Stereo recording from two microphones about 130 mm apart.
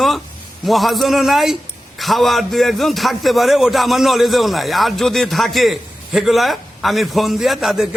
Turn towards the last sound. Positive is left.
turn(degrees=0)  # may be behind; listen again after turning